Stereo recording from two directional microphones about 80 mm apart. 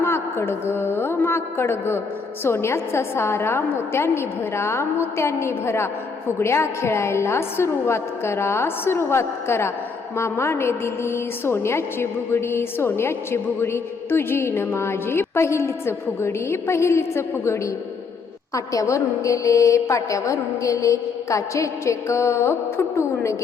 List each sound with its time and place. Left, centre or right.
0.0 s a woman's voice: left